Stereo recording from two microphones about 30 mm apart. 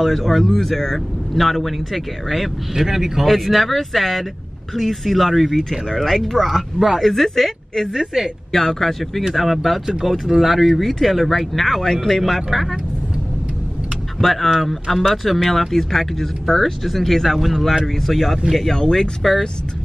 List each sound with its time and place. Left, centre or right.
0.0 s speech: centre
2.7 s speech: centre
3.3 s speech: centre
5.6 s speech: centre
6.8 s speech: centre
7.4 s speech: centre
8.1 s speech: centre
8.5 s speech: centre
12.2 s speech: centre
14.2 s speech: centre
15.0 s speech: centre
18.7 s speech: centre